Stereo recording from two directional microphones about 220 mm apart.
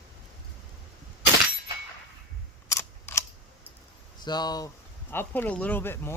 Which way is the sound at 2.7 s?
10° left (ahead or behind).